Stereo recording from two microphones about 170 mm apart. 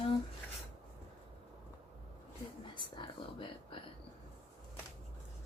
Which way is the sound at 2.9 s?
30° left (ahead or behind).